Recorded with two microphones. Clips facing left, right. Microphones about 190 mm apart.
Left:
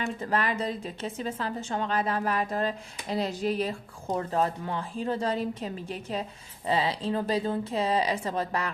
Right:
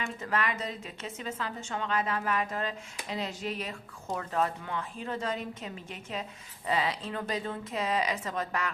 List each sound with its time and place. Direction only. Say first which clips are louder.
0.0 s a woman's voice: left 3 dB; 35° left (ahead or behind)